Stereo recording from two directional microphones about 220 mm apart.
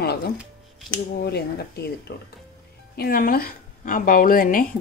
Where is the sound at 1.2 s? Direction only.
45° left (ahead or behind).